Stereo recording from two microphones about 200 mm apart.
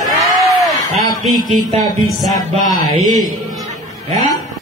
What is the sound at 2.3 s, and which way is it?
Mantra, 20° left (ahead or behind).